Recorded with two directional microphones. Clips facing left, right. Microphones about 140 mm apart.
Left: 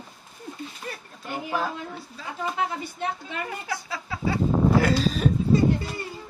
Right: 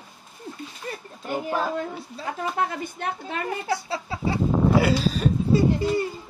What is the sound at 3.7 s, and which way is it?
Speech, 30° right (ahead or behind).